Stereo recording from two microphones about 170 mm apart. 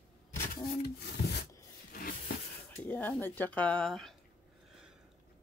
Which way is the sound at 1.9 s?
60° left (ahead or behind).